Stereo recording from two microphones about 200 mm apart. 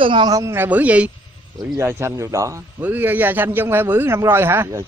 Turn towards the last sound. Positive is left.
turn(degrees=-10)  # may be behind; listen again after turning